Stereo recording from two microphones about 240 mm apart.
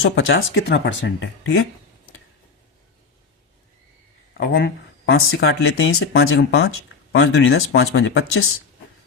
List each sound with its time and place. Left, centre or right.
0.0 s speech: left
4.5 s speech: left